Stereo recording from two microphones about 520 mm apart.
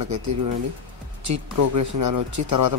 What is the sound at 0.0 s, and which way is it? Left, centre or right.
Speech, right.